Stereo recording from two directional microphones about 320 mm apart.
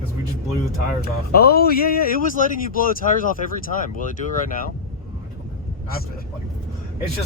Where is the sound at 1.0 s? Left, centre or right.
Left.